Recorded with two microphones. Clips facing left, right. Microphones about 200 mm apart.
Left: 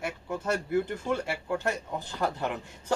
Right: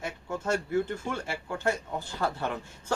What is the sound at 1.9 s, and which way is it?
Speech, 15° left (ahead or behind).